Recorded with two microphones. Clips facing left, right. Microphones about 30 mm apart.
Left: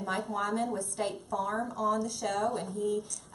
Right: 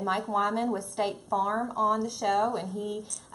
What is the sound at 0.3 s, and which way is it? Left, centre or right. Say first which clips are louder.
A woman's voice: right 5 dB; centre.